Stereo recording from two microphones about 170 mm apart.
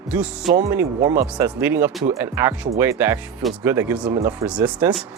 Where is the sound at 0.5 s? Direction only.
15° right (ahead or behind).